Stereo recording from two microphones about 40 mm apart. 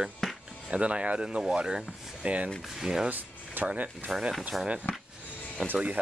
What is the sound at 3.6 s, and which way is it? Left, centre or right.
Speech, right.